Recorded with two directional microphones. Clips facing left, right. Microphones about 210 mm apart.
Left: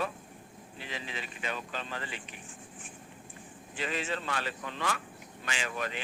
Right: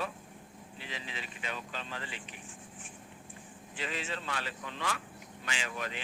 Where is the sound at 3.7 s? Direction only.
50° left (ahead or behind).